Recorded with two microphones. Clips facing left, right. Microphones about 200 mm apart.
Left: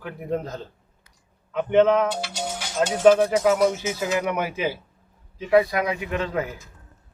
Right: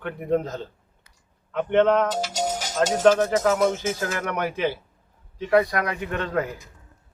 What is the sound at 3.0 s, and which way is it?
Speech, 10° left (ahead or behind).